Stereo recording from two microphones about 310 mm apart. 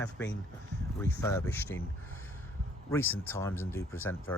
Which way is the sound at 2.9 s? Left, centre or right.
Centre.